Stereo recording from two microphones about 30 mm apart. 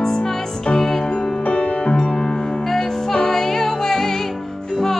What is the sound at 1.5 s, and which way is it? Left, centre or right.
Music, left.